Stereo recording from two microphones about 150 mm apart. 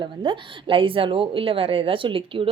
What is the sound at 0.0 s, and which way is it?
Speech, 35° right (ahead or behind).